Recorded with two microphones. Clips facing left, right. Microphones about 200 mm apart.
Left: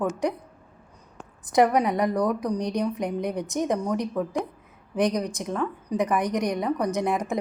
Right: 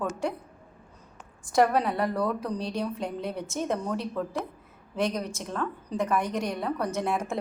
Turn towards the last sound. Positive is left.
turn(degrees=15)  # may be behind; listen again after turning